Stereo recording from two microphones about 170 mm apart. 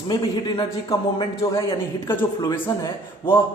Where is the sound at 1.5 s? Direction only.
20° left (ahead or behind).